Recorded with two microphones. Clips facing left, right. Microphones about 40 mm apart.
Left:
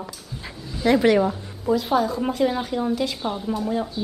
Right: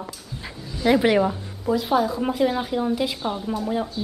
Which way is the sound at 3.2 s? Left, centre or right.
Centre.